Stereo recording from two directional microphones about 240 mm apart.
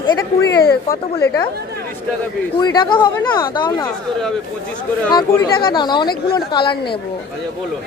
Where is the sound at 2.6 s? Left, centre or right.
Centre.